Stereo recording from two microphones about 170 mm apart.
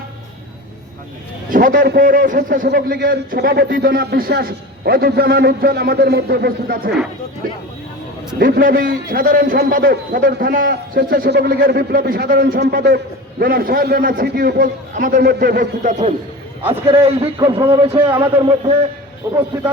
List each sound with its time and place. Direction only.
1.5 s a man's voice: 55° right (ahead or behind)
8.4 s a man's voice: 55° right (ahead or behind)
15.9 s a man's voice: 45° right (ahead or behind)
17.5 s a man's voice: 30° right (ahead or behind)